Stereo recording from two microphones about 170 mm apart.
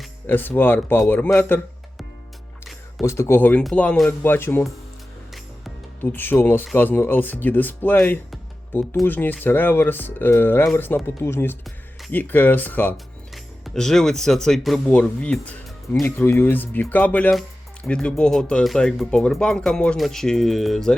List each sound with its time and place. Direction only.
0.3 s speech: 10° left (ahead or behind)
3.0 s speech: 15° left (ahead or behind)
6.0 s speech: 10° left (ahead or behind)